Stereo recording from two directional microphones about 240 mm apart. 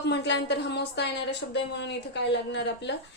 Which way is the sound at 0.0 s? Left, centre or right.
Left.